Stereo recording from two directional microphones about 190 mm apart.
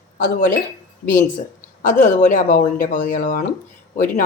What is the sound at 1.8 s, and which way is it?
Speech, 45° left (ahead or behind).